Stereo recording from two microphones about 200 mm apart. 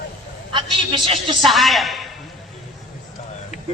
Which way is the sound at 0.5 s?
25° right (ahead or behind).